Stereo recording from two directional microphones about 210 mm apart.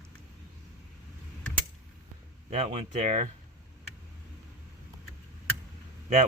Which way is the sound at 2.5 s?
30° right (ahead or behind).